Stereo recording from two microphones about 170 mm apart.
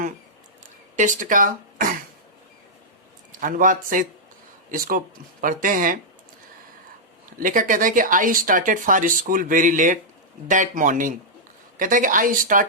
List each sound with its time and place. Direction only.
0.9 s speech: 50° right (ahead or behind)
3.4 s speech: 50° right (ahead or behind)
7.3 s speech: 50° right (ahead or behind)